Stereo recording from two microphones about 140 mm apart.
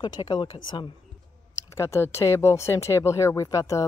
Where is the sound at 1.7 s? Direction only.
20° left (ahead or behind).